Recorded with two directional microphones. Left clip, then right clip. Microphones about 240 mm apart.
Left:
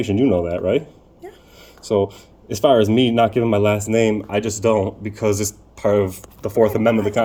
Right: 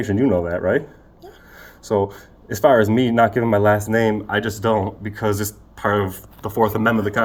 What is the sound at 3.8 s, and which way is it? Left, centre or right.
Speech, centre.